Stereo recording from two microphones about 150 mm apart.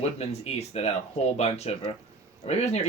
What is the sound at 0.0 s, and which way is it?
Speech, 45° left (ahead or behind).